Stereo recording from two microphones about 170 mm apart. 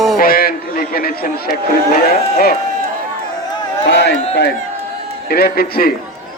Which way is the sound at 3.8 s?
90° left.